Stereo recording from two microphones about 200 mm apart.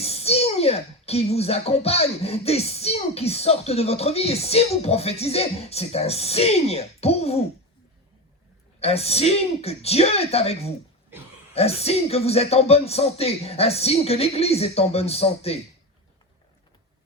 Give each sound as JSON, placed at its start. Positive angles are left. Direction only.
{"t": 0.0, "sound": "a child's voice", "side_deg": 30}
{"t": 8.8, "sound": "a child's voice", "side_deg": 30}